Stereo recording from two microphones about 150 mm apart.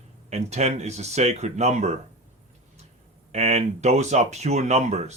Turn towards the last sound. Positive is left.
turn(degrees=-45)  # may be behind; listen again after turning